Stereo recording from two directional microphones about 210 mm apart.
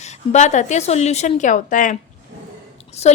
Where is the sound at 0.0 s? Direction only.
35° left (ahead or behind).